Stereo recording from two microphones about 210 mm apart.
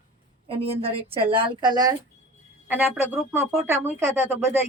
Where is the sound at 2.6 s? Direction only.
10° right (ahead or behind).